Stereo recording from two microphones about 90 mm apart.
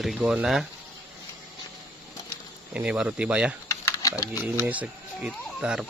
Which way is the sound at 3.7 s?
40° left (ahead or behind).